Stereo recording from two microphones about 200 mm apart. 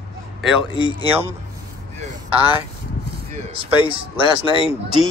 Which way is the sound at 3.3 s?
25° right (ahead or behind).